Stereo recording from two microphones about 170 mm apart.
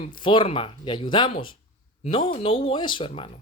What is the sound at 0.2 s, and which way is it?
Speech, 30° left (ahead or behind).